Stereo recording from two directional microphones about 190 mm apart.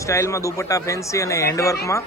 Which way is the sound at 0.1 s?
15° left (ahead or behind).